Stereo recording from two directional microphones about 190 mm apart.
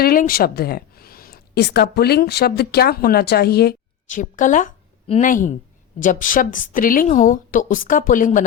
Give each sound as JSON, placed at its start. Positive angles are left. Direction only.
{"t": 0.0, "sound": "a woman's voice", "side_deg": 50}